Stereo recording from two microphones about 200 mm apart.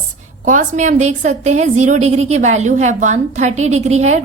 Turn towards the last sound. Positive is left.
turn(degrees=-35)  # may be behind; listen again after turning